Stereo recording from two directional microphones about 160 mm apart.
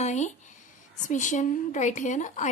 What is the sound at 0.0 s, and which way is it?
A woman's voice, 45° left (ahead or behind).